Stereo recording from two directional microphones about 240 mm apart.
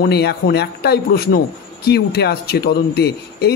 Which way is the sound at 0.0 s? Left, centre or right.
Left.